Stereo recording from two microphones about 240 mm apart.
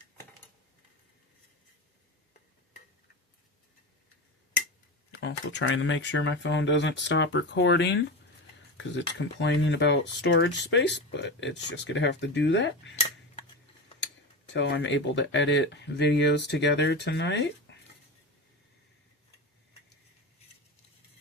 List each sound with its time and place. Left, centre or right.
5.1 s speech: left
14.5 s speech: left